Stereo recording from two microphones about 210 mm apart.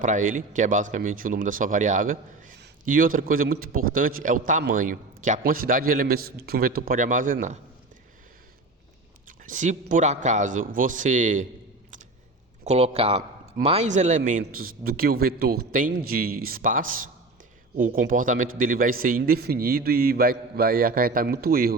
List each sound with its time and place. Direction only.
0.0 s speech: 35° right (ahead or behind)
9.2 s speech: 40° right (ahead or behind)
12.6 s speech: 30° right (ahead or behind); by 21.8 s 45° right (ahead or behind)